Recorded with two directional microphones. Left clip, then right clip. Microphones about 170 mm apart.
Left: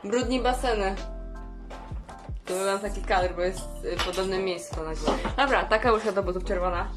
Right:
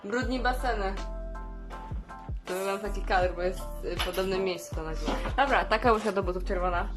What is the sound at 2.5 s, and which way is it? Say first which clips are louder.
Speech: left 4 dB; centre (ahead or behind).